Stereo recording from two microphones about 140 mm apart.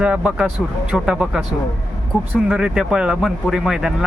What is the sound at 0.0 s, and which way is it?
Speech, 10° right (ahead or behind).